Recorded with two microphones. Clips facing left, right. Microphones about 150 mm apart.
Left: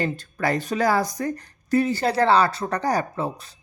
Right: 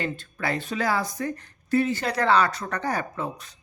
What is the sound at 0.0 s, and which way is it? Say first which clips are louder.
Speech: left 5 dB; 40° left (ahead or behind).